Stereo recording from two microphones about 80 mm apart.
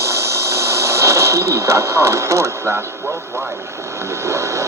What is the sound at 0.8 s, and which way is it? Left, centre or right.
Speech, right.